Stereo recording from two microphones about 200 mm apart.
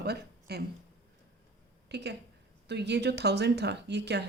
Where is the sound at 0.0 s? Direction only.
55° right (ahead or behind).